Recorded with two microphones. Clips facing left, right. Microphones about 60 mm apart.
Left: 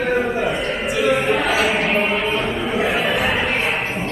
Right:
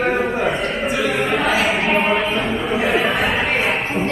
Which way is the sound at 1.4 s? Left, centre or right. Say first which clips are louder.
Right 1 dB; right.